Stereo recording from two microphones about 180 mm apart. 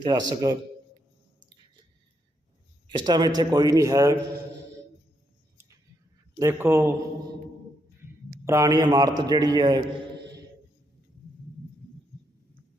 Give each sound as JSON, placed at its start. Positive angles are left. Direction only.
{"t": 0.0, "sound": "a man's voice", "side_deg": -25}
{"t": 2.8, "sound": "a man's voice", "side_deg": -25}
{"t": 6.4, "sound": "a man's voice", "side_deg": -15}
{"t": 8.4, "sound": "a man's voice", "side_deg": -15}